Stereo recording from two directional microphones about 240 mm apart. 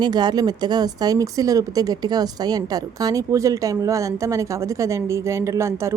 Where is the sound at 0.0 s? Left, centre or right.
Centre.